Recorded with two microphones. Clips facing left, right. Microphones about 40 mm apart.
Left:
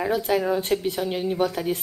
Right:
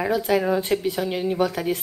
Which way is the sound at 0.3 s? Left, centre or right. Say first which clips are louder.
Right 2 dB; centre.